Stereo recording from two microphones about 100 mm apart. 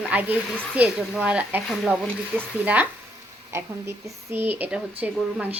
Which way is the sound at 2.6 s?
15° right (ahead or behind).